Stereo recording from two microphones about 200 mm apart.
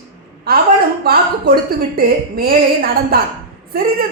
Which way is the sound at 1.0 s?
50° right (ahead or behind).